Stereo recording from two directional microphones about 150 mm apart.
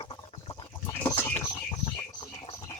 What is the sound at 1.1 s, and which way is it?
Bird, 15° left (ahead or behind).